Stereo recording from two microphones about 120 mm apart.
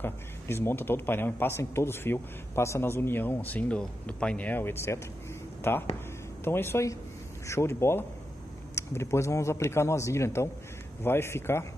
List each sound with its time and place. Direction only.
0.0 s a man's voice: 20° left (ahead or behind)